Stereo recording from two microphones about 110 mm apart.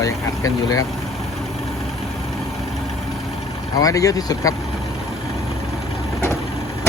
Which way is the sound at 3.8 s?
30° left (ahead or behind).